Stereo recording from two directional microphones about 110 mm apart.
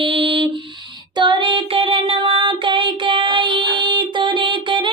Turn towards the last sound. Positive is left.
turn(degrees=-50)  # may be behind; listen again after turning